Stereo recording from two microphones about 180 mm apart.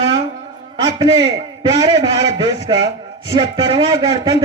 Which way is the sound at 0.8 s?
25° right (ahead or behind).